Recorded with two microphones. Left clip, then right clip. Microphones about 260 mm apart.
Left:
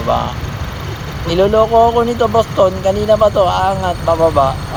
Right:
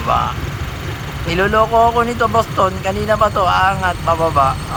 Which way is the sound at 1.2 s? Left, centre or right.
Right.